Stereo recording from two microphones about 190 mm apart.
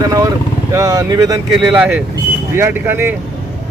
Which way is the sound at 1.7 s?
5° right (ahead or behind).